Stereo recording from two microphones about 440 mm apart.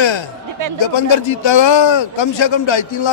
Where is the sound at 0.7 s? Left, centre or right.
Left.